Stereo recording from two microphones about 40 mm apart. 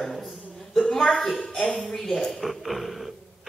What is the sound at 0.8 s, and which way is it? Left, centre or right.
Speech, centre.